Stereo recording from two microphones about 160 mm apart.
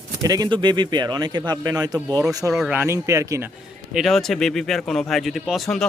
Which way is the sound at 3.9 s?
Centre (ahead or behind).